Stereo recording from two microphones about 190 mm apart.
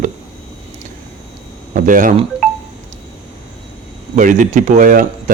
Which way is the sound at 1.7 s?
45° right (ahead or behind).